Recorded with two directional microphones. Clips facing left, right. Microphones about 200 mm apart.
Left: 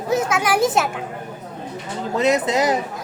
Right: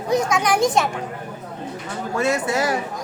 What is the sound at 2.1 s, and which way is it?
Speech, 20° left (ahead or behind).